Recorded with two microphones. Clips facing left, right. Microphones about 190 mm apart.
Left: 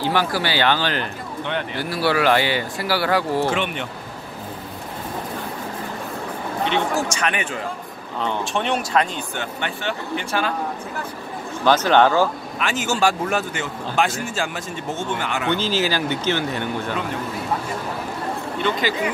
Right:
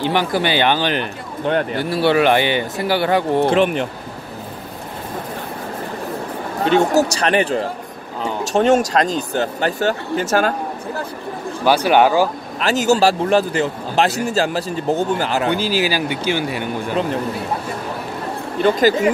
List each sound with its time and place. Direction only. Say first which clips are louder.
0.0 s speech: right 3 dB; 20° right (ahead or behind)
1.4 s speech: right 8 dB; 45° right (ahead or behind)
1.8 s speech: right 3 dB; 25° right (ahead or behind)
3.4 s speech: right 8 dB; 40° right (ahead or behind)
6.6 s speech: right 8 dB; 40° right (ahead or behind)
11.6 s speech: right 2 dB; 10° right (ahead or behind)
12.5 s speech: right 8 dB; 40° right (ahead or behind)
15.5 s speech: right 3 dB; 10° right (ahead or behind)
18.6 s speech: right 9 dB; 40° right (ahead or behind)